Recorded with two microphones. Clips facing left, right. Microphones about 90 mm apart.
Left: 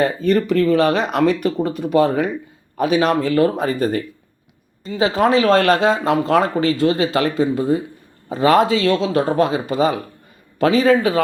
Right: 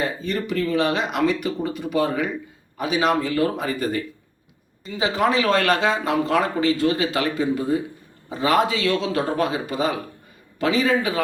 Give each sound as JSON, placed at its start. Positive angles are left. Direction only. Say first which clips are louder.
{"t": 0.0, "sound": "speech", "louder": "left 8 dB", "side_deg": 55}